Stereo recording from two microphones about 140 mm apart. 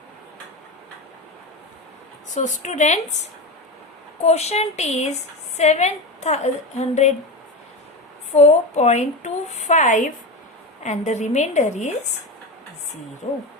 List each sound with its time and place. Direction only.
2.3 s a woman's voice: 60° left (ahead or behind)
4.3 s a woman's voice: 50° left (ahead or behind)
8.3 s a woman's voice: 55° left (ahead or behind)
13.2 s a woman's voice: 60° left (ahead or behind)